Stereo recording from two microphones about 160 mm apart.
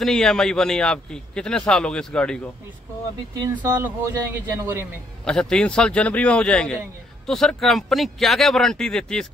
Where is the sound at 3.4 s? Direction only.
15° right (ahead or behind).